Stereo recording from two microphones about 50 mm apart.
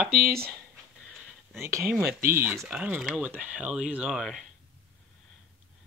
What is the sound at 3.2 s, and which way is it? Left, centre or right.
Speech, right.